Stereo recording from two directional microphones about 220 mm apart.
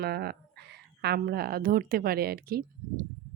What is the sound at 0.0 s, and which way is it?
Speech, 45° right (ahead or behind).